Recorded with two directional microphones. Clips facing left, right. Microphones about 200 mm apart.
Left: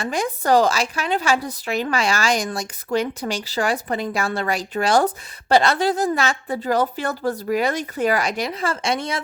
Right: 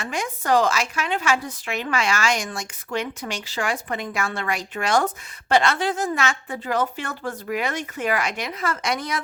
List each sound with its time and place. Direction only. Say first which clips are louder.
0.0 s speech: left 5 dB; 35° left (ahead or behind)